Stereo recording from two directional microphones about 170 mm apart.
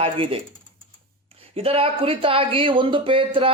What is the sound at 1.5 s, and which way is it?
Speech, 35° right (ahead or behind).